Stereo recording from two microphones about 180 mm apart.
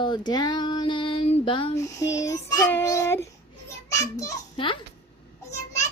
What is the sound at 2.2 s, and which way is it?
Child singing, 20° left (ahead or behind).